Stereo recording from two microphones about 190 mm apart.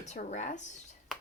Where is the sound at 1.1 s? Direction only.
Centre (ahead or behind).